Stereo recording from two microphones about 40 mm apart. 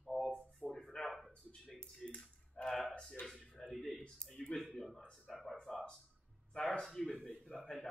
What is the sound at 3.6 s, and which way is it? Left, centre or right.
A man's voice, centre.